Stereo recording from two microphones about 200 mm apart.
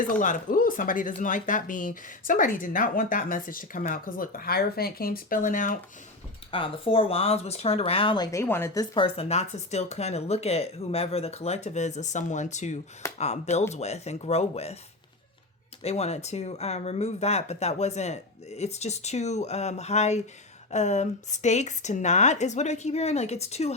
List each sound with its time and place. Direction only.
0.0 s speech: 40° left (ahead or behind)
6.5 s speech: 25° left (ahead or behind)
15.8 s speech: 30° left (ahead or behind)